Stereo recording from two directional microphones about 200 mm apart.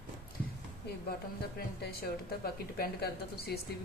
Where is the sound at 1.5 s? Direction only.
50° left (ahead or behind).